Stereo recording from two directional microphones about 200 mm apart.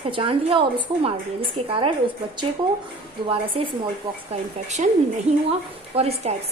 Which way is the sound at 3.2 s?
25° right (ahead or behind).